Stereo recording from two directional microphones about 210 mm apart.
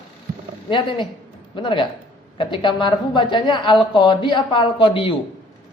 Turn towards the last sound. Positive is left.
turn(degrees=25)  # may be behind; listen again after turning